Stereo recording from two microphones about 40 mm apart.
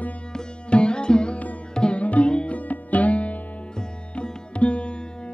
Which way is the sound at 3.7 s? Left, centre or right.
Left.